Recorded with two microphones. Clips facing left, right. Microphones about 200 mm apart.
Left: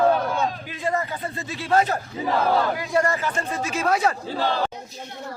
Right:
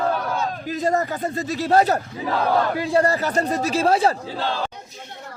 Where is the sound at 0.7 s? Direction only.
40° right (ahead or behind).